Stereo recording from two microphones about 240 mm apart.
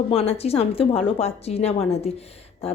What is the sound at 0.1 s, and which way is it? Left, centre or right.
A woman's voice, left.